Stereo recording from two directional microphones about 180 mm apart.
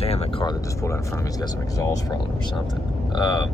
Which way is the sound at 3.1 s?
25° left (ahead or behind).